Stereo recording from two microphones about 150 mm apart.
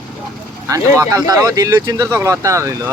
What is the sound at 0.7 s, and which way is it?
Speech, 25° right (ahead or behind).